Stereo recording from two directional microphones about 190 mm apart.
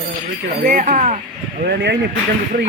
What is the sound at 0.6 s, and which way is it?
Speech, 45° right (ahead or behind).